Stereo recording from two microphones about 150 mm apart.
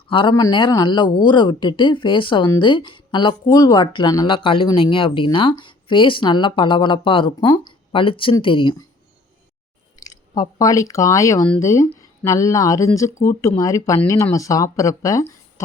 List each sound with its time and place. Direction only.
0.1 s speech: 35° left (ahead or behind)
10.0 s speech: 25° left (ahead or behind)